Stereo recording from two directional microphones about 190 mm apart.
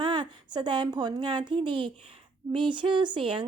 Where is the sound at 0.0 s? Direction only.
25° right (ahead or behind).